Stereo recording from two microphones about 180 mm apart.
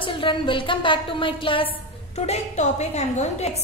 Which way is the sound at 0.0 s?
30° left (ahead or behind).